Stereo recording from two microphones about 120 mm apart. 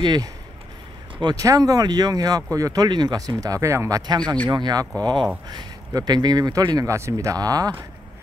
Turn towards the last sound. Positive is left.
turn(degrees=-30)  # may be behind; listen again after turning